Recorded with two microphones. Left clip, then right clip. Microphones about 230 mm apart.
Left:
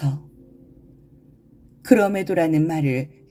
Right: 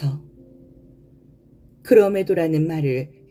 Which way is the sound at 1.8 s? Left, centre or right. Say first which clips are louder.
Right 3 dB; left.